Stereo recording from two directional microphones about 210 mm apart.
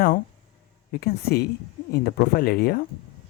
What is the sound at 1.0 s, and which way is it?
Speech, 45° left (ahead or behind).